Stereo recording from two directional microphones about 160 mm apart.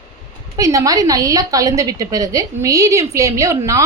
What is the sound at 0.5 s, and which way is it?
A woman's voice, 20° right (ahead or behind).